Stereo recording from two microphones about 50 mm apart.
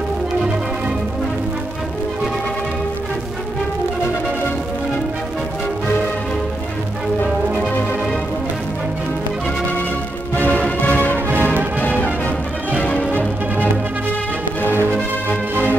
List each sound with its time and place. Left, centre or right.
10.3 s music: left